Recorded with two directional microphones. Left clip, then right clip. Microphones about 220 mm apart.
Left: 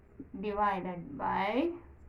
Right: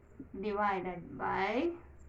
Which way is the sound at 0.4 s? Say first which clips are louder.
Left 2 dB; 20° left (ahead or behind).